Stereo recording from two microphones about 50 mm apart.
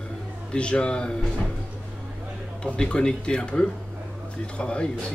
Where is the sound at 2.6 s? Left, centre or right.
Left.